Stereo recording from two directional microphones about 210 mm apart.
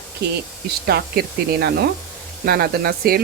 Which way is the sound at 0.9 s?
50° right (ahead or behind).